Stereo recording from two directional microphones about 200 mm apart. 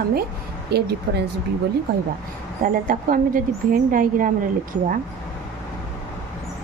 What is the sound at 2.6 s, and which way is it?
A woman's voice, 45° right (ahead or behind).